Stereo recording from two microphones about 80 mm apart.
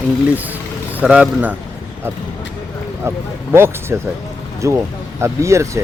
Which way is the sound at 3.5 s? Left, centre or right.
Right.